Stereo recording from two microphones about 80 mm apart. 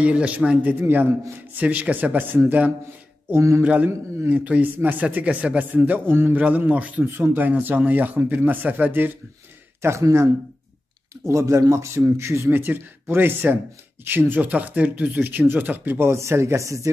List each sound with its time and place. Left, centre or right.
0.0 s a man's voice: centre
0.6 s speech: right
3.3 s speech: right
3.6 s speech: centre
9.8 s speech: right